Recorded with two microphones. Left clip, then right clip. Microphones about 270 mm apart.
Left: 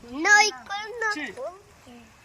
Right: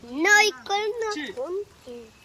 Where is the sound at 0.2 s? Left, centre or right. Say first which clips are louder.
Even; right.